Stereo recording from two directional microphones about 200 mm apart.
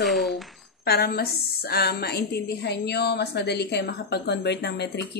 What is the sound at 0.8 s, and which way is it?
A woman's voice, 50° left (ahead or behind).